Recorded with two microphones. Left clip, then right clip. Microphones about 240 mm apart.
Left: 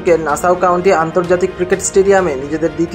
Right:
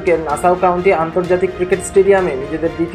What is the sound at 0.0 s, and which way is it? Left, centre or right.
Speech, left.